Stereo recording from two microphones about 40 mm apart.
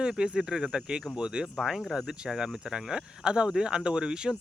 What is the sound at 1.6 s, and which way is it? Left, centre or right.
Speech, centre.